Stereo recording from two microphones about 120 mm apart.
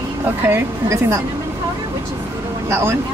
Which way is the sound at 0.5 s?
25° right (ahead or behind).